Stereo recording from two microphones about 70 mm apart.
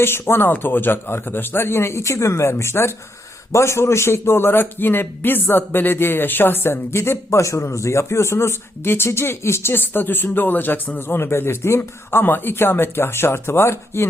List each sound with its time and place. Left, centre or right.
0.0 s a man's voice: left